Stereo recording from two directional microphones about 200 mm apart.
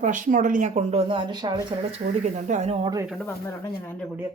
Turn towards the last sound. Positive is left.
turn(degrees=5)  # may be behind; listen again after turning